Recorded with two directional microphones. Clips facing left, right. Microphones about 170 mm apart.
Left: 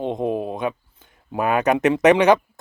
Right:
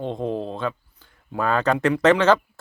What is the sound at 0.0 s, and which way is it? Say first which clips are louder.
Speech: left 3 dB; 20° left (ahead or behind).